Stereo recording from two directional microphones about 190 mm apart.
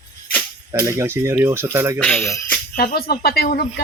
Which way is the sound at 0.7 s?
15° right (ahead or behind).